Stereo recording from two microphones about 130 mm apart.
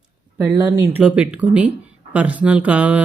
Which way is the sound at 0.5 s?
30° right (ahead or behind).